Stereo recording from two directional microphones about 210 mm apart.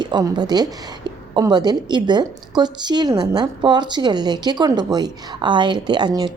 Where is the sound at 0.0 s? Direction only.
20° right (ahead or behind).